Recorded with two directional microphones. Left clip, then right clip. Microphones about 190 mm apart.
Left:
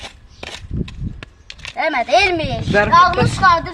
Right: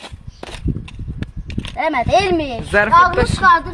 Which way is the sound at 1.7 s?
5° left (ahead or behind).